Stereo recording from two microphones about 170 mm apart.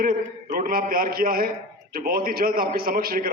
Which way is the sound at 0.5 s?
60° right (ahead or behind).